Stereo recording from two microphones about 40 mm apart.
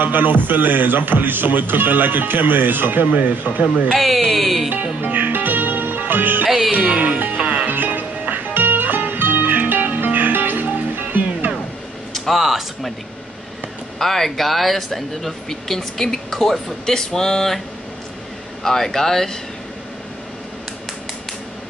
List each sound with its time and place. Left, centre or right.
0.0 s speech: right
3.9 s speech: centre
5.0 s music: right
6.5 s speech: centre
7.6 s music: right
12.3 s speech: centre
13.9 s speech: centre
18.6 s speech: centre